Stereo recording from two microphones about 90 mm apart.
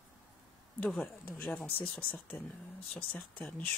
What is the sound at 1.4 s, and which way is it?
Speech, 5° left (ahead or behind).